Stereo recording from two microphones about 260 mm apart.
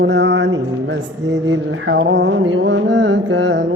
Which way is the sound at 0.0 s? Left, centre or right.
Right.